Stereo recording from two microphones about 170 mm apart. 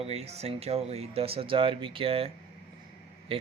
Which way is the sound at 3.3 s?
35° right (ahead or behind).